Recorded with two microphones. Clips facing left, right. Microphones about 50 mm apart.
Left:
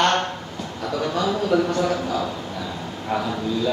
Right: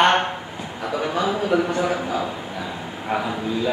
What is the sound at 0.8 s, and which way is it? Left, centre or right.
A man's voice, centre.